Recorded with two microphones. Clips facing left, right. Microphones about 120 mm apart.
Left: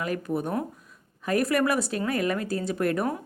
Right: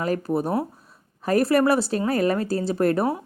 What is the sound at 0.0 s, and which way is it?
Speech, 35° right (ahead or behind).